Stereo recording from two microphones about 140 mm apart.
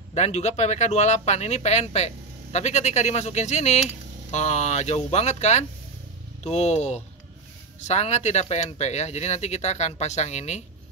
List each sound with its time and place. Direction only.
0.1 s speech: 50° left (ahead or behind)